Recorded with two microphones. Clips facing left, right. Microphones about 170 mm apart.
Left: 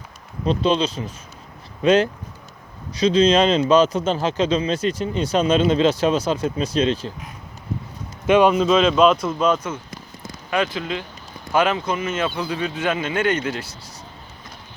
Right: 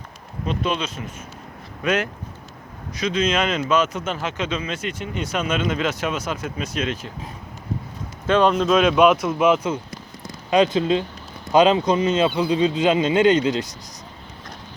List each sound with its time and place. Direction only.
0.4 s speech: 30° left (ahead or behind)
8.3 s a man's voice: 10° left (ahead or behind); by 9.7 s 5° right (ahead or behind)
10.5 s a man's voice: 20° right (ahead or behind)